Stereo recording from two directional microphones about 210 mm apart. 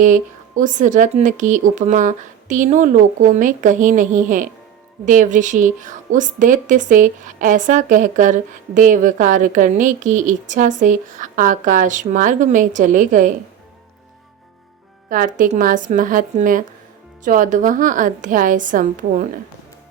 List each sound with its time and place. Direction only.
0.0 s a woman's voice: 35° right (ahead or behind)
15.1 s a woman's voice: 40° right (ahead or behind)